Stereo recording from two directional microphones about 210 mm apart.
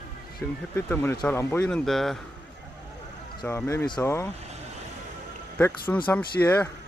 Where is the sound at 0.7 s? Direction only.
10° left (ahead or behind).